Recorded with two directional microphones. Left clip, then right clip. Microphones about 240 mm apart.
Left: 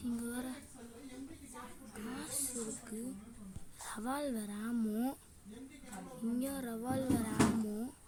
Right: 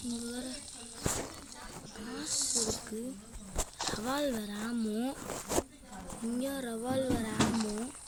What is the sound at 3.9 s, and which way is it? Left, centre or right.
Speech, centre.